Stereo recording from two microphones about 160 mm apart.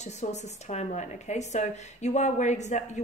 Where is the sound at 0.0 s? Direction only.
45° left (ahead or behind).